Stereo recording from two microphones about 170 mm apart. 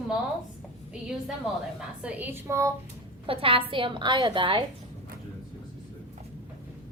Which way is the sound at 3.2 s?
30° right (ahead or behind).